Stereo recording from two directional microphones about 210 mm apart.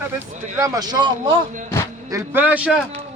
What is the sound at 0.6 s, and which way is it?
Speech, 15° right (ahead or behind).